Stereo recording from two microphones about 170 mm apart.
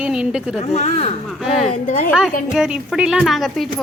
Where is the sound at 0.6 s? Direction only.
40° left (ahead or behind).